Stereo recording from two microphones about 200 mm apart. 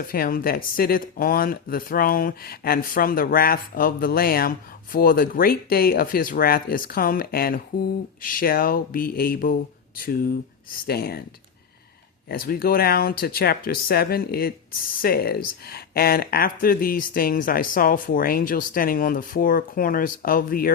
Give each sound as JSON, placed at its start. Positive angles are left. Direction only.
{"t": 0.1, "sound": "speech", "side_deg": 45}
{"t": 12.3, "sound": "speech", "side_deg": 50}